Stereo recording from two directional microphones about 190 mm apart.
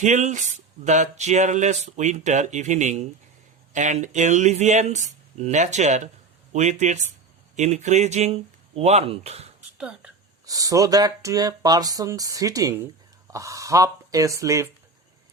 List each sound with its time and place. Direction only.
0.0 s speech: 40° right (ahead or behind)
9.7 s a woman's voice: 5° right (ahead or behind)
10.4 s speech: 20° right (ahead or behind)